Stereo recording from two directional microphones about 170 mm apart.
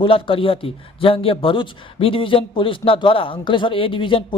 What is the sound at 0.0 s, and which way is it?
A man's voice, 30° left (ahead or behind).